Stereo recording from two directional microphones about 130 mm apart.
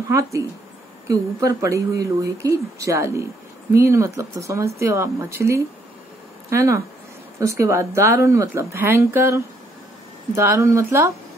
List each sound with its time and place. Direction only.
0.1 s speech: 20° right (ahead or behind)